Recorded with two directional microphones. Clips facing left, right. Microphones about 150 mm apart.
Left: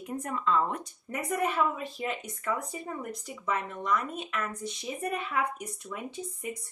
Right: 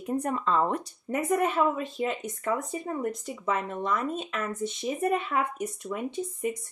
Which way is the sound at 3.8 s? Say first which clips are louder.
Right 2 dB; 25° right (ahead or behind).